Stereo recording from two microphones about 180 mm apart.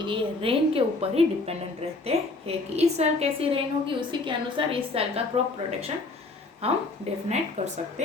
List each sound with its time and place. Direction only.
0.0 s a woman's voice: 30° right (ahead or behind)
6.6 s a woman's voice: 35° right (ahead or behind)